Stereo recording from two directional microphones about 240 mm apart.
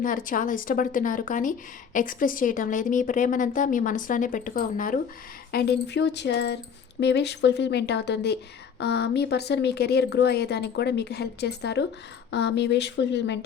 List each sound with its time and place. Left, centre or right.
0.0 s speech: left